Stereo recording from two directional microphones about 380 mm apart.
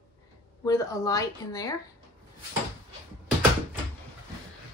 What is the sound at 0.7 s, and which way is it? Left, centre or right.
Speech, centre.